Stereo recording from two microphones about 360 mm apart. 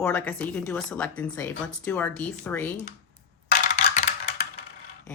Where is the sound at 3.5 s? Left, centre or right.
Centre.